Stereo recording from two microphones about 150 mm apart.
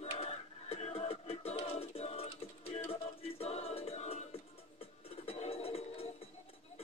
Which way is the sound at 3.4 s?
45° left (ahead or behind).